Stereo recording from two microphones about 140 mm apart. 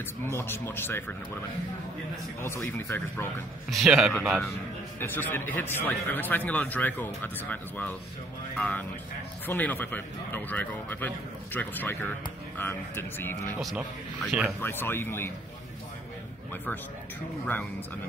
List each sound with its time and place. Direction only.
0.3 s speech: 15° left (ahead or behind)
2.4 s speech: 15° left (ahead or behind)
3.8 s speech: 5° right (ahead or behind)
5.0 s speech: 15° left (ahead or behind)
13.6 s speech: centre (ahead or behind)
14.6 s speech: 15° left (ahead or behind)